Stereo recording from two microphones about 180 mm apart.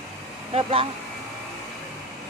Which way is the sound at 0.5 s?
30° right (ahead or behind).